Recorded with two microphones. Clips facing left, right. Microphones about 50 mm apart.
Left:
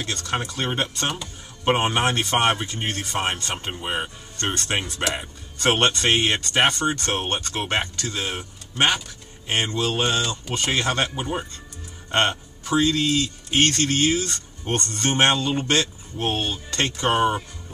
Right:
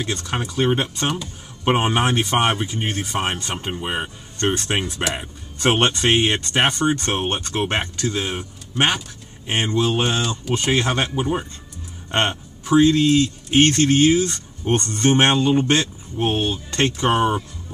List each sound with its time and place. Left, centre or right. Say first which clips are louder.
0.0 s a man's voice: right 2 dB; centre
8.2 s speech: right 3 dB; centre
8.7 s a man's voice: right 1 dB; centre
17.1 s speech: even; centre